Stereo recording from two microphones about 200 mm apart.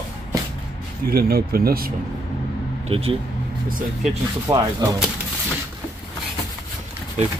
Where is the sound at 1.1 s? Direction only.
50° right (ahead or behind).